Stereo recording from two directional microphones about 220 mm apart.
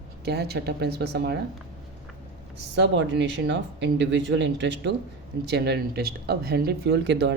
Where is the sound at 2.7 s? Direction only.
55° right (ahead or behind).